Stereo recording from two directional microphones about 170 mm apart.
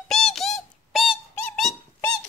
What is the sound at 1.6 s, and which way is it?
Squeak, centre (ahead or behind).